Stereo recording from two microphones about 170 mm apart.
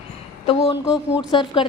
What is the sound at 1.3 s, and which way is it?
Speech, 25° left (ahead or behind).